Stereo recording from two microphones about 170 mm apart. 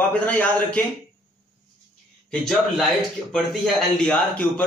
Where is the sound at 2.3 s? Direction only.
Centre (ahead or behind).